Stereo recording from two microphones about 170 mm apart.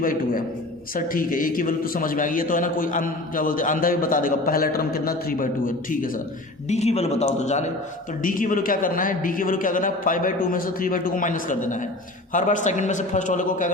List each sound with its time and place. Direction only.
0.0 s a man's voice: 55° left (ahead or behind)
6.7 s a man's voice: 40° left (ahead or behind)